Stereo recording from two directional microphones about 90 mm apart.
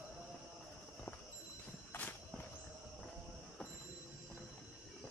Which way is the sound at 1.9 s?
20° left (ahead or behind).